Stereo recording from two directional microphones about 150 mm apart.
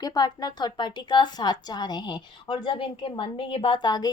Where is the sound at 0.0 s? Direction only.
25° left (ahead or behind).